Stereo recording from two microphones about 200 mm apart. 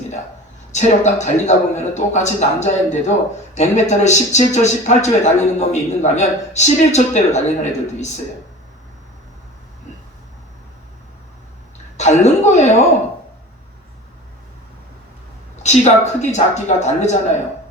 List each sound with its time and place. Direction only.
0.7 s a man's voice: 35° left (ahead or behind)
11.9 s a man's voice: 35° left (ahead or behind)
15.6 s a man's voice: 35° left (ahead or behind)